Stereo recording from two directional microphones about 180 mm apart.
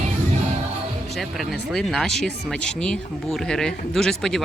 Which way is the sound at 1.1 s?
Centre (ahead or behind).